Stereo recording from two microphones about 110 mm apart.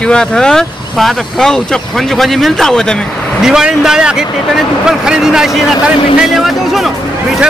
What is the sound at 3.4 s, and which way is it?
Speech, 5° right (ahead or behind).